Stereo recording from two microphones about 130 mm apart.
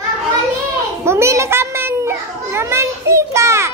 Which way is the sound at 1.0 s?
20° right (ahead or behind).